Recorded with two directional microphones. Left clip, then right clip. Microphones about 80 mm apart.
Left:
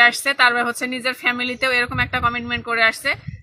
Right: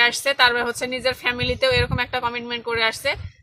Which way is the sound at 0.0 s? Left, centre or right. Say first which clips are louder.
Left 3 dB; right.